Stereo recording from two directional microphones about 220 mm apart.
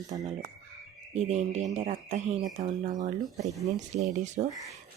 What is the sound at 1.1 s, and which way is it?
Speech, 30° right (ahead or behind).